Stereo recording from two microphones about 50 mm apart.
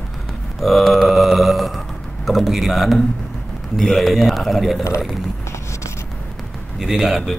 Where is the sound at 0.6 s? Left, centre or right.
Centre.